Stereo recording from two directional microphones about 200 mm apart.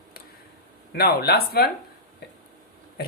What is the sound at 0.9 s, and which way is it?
Speech, 50° left (ahead or behind).